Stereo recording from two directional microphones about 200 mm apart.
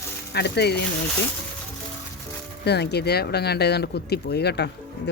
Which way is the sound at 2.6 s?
55° left (ahead or behind).